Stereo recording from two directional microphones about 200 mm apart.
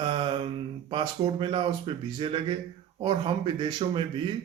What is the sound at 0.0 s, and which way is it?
Mantra, 25° right (ahead or behind).